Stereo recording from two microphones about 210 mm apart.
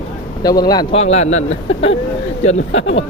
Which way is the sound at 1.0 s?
30° left (ahead or behind).